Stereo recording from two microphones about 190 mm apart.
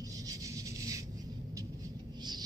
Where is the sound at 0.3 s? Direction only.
15° right (ahead or behind).